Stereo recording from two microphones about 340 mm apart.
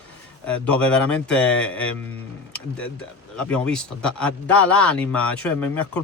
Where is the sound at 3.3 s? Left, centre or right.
Centre.